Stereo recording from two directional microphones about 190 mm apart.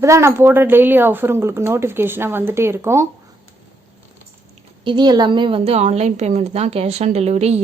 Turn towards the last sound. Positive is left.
turn(degrees=-35)  # may be behind; listen again after turning